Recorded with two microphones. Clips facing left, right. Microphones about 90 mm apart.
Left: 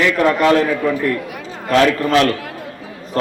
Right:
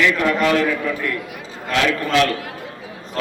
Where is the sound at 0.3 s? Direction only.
40° left (ahead or behind).